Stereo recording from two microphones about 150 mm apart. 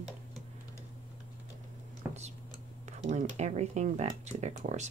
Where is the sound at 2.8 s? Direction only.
50° right (ahead or behind).